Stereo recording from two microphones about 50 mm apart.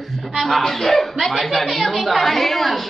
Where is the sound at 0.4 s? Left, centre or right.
Centre.